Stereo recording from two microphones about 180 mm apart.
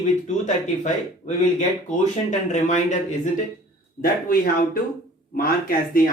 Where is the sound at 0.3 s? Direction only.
40° left (ahead or behind).